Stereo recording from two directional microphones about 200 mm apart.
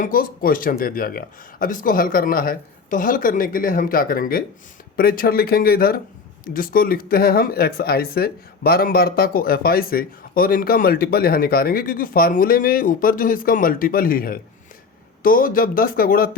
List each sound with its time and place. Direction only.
0.0 s speech: 45° left (ahead or behind)